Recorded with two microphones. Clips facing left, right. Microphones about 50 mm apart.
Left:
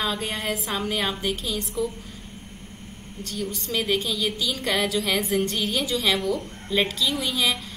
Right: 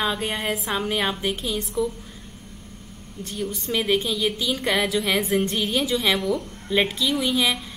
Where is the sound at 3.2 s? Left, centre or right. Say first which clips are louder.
Right 1 dB; right.